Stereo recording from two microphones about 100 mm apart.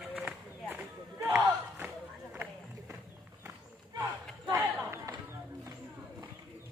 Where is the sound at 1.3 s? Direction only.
15° right (ahead or behind).